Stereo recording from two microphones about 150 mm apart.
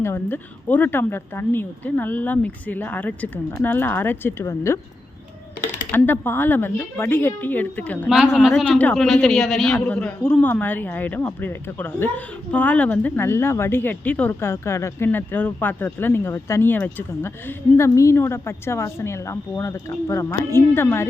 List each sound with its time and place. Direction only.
0.0 s a woman's voice: 15° left (ahead or behind)
5.9 s a woman's voice: 15° left (ahead or behind)
8.1 s a woman's voice: 5° right (ahead or behind)
8.6 s a woman's voice: 10° left (ahead or behind)